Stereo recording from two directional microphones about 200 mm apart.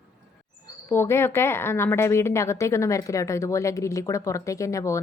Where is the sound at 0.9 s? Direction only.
10° left (ahead or behind).